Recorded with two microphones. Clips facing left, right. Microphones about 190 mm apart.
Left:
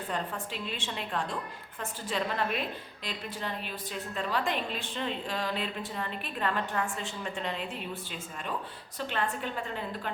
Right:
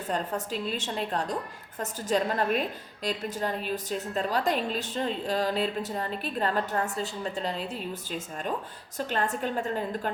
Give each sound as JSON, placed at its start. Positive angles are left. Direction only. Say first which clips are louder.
{"t": 0.1, "sound": "a woman's voice", "louder": "right 6 dB", "side_deg": -40}